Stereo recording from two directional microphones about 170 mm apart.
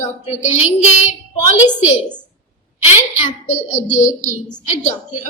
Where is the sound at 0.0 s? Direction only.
45° left (ahead or behind).